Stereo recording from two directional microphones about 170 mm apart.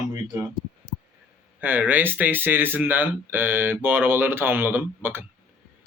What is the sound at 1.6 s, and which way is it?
Speech, 10° right (ahead or behind).